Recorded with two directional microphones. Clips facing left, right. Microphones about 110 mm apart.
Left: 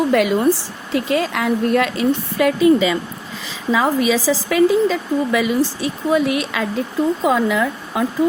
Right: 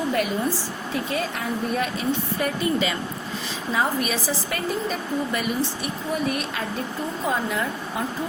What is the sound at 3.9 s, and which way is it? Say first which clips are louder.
A woman's voice: left 9 dB; 90° left.